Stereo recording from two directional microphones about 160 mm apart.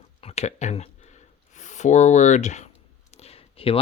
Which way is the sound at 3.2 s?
40° left (ahead or behind).